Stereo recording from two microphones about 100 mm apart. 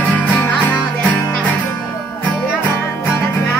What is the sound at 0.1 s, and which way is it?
Music, 15° left (ahead or behind).